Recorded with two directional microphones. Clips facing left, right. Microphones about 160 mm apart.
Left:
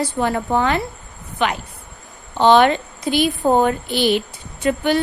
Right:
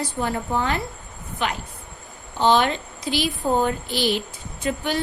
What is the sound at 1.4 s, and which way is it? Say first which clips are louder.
A woman's voice: left 6 dB; 70° left (ahead or behind).